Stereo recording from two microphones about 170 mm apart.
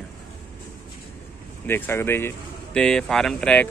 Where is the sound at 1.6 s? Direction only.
10° left (ahead or behind).